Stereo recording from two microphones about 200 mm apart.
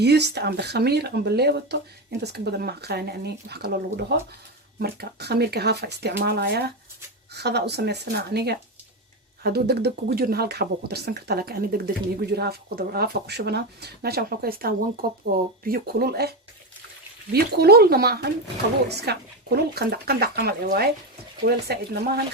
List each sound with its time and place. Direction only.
0.0 s speech: 55° right (ahead or behind)
17.3 s speech: 50° right (ahead or behind)